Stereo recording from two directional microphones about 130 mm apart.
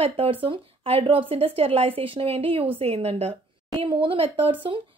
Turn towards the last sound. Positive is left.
turn(degrees=-40)  # may be behind; listen again after turning